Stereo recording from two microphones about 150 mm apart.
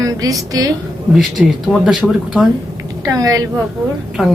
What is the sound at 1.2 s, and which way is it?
Speech, centre (ahead or behind).